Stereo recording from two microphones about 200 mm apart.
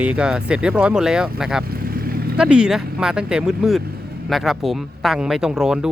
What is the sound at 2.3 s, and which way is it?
Speech, 5° right (ahead or behind).